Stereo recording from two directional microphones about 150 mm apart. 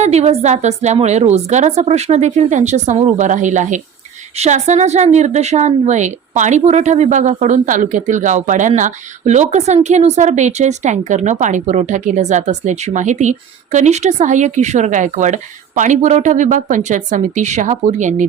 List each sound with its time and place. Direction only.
0.0 s a woman's voice: 45° right (ahead or behind)